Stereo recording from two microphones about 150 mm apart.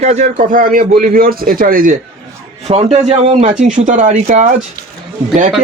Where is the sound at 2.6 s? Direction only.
45° right (ahead or behind).